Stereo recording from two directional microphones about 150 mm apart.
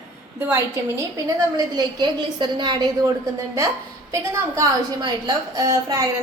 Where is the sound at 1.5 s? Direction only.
30° right (ahead or behind).